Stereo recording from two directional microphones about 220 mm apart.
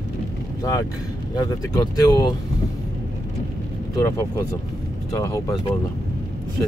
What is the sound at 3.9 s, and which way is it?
Speech, 15° left (ahead or behind).